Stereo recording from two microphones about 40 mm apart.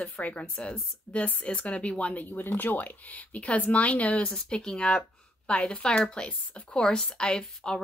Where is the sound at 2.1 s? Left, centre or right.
Left.